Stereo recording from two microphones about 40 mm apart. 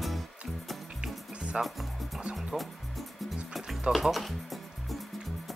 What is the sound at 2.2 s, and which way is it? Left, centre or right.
Music, right.